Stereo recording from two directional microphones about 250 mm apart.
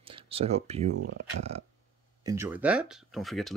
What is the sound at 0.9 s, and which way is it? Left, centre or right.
Speech, right.